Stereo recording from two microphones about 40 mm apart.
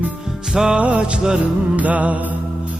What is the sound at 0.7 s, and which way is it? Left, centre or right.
Music, right.